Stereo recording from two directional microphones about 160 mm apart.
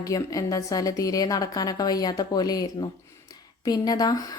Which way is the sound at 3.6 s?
25° left (ahead or behind).